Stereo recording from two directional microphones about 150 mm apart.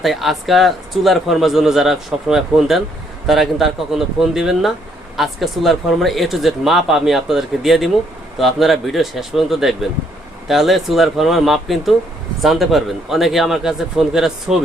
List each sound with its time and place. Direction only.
0.0 s speech: centre (ahead or behind)